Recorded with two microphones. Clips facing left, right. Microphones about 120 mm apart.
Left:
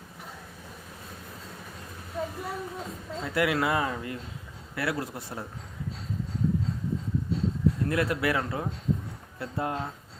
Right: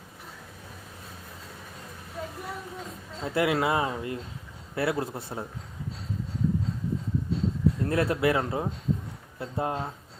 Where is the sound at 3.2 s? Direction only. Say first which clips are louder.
Right 1 dB; 25° right (ahead or behind).